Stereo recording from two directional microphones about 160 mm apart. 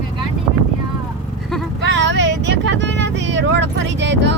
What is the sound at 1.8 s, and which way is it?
Vehicle, 90° right.